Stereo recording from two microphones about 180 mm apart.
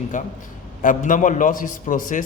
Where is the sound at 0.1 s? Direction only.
45° left (ahead or behind).